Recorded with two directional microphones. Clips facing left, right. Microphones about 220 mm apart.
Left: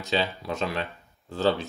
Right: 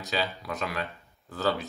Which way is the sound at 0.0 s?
25° left (ahead or behind).